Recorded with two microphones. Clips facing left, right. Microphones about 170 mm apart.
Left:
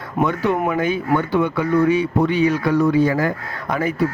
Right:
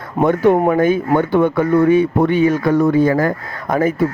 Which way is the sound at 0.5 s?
30° right (ahead or behind).